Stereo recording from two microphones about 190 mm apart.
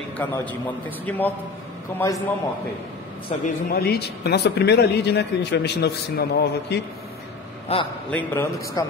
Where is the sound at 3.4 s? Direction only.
55° left (ahead or behind).